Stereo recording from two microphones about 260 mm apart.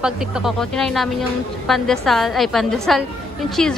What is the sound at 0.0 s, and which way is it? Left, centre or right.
A woman's voice, centre.